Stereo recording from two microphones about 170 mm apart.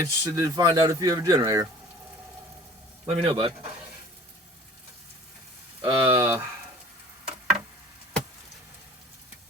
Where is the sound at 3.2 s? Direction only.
30° right (ahead or behind).